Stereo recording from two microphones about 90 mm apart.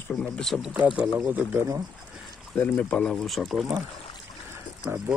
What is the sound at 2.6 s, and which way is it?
Speech, 20° left (ahead or behind).